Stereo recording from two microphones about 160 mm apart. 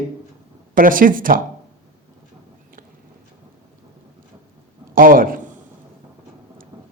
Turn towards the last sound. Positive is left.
turn(degrees=-60)  # may be behind; listen again after turning